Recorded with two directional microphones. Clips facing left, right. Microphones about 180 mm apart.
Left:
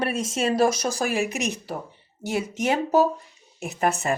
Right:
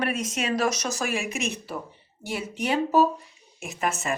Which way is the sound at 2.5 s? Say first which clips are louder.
Left 1 dB; 45° left (ahead or behind).